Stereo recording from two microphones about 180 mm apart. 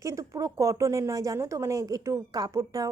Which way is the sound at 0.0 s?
15° right (ahead or behind).